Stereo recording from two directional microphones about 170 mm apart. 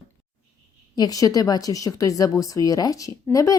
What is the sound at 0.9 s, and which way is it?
A woman's voice, 20° left (ahead or behind).